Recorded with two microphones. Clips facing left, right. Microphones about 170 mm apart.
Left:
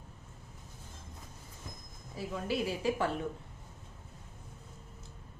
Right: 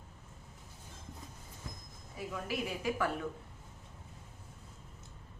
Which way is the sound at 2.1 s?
30° left (ahead or behind).